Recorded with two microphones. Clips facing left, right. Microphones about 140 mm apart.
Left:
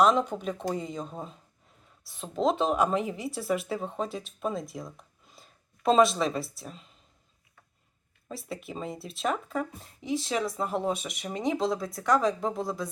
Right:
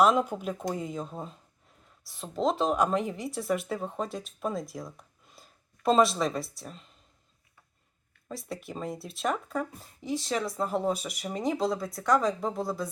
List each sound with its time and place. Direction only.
0.0 s speech: 5° right (ahead or behind)
8.3 s speech: centre (ahead or behind)